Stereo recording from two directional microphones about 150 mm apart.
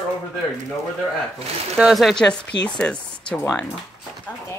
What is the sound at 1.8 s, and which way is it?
Speech, centre (ahead or behind).